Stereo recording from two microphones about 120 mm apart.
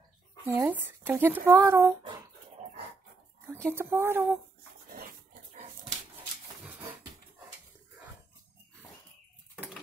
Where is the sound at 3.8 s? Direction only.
20° right (ahead or behind).